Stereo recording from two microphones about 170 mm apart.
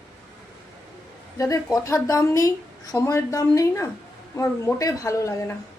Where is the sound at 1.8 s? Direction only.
15° left (ahead or behind).